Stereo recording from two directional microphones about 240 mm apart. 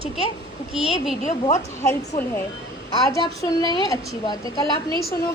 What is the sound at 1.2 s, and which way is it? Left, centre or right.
Speech, left.